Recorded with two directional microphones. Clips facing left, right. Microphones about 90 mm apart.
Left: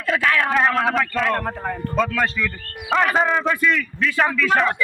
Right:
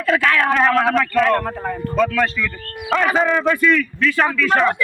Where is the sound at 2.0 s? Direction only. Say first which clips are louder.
Right 3 dB; 35° left (ahead or behind).